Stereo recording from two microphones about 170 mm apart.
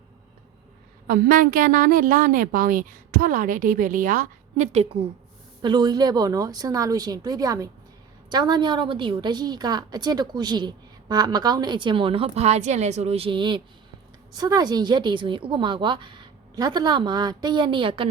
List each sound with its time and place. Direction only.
1.0 s a woman's voice: 55° right (ahead or behind); by 5.0 s 40° right (ahead or behind)
5.6 s a woman's voice: 25° right (ahead or behind)